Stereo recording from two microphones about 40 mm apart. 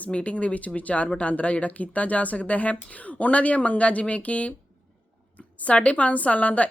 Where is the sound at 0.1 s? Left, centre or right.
Left.